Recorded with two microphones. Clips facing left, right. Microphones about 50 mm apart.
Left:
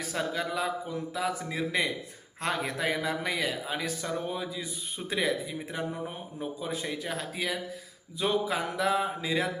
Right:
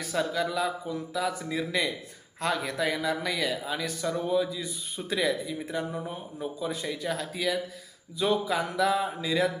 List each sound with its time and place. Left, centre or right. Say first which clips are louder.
0.0 s a man's voice: right 3 dB; left